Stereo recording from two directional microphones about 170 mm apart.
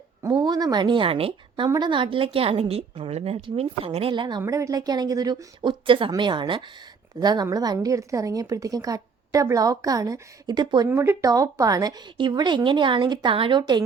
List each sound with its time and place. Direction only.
0.2 s a woman's voice: 20° right (ahead or behind)
10.8 s a woman's voice: 15° right (ahead or behind)